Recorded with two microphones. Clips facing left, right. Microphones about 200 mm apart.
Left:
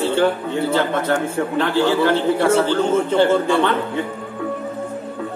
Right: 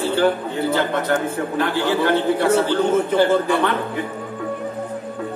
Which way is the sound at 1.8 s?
25° left (ahead or behind).